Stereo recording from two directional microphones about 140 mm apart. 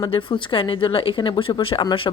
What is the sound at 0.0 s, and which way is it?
A woman's voice, 40° left (ahead or behind).